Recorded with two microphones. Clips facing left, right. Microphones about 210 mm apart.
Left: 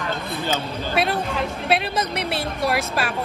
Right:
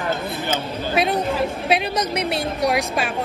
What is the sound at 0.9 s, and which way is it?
A woman's voice, centre (ahead or behind).